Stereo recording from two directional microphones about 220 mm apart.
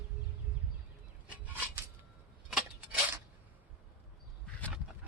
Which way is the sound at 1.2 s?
5° right (ahead or behind).